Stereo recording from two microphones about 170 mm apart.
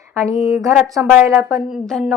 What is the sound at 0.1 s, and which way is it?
Speech, 15° right (ahead or behind).